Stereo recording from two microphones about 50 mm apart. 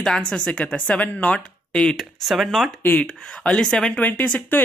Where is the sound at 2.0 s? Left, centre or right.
Centre.